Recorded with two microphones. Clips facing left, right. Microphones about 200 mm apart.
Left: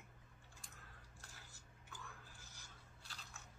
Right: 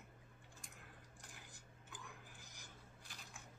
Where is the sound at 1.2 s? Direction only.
15° right (ahead or behind).